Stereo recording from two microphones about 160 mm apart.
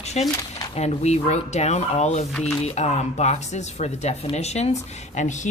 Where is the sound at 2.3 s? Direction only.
5° left (ahead or behind).